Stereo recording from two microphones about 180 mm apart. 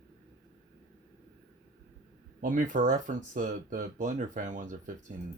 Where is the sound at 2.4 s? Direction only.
45° right (ahead or behind).